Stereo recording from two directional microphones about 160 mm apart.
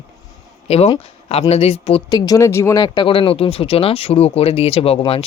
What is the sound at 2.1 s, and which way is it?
Speech, 25° left (ahead or behind).